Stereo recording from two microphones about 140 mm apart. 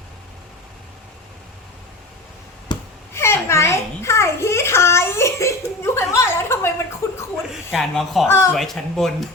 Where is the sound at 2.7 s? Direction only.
35° left (ahead or behind).